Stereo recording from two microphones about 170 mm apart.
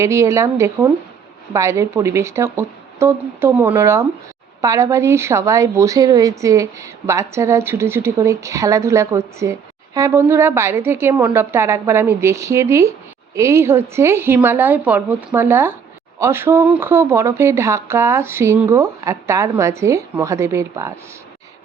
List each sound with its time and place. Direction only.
0.0 s a woman's voice: 15° right (ahead or behind)